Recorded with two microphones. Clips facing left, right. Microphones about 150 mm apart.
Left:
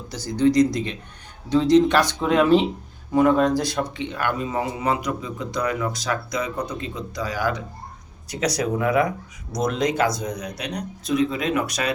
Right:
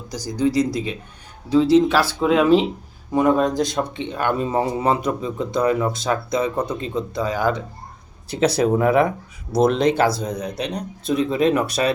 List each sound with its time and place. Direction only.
0.1 s speech: 10° right (ahead or behind)
3.1 s speech: 20° right (ahead or behind)
4.4 s speech: 30° right (ahead or behind)